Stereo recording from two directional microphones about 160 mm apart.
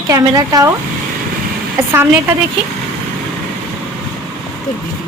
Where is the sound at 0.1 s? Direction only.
20° right (ahead or behind).